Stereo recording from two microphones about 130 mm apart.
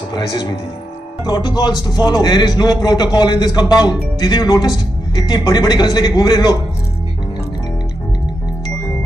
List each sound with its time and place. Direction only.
1.2 s speech: 35° left (ahead or behind)